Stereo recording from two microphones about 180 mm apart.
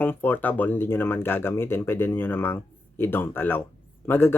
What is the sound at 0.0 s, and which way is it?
Speech, 10° left (ahead or behind).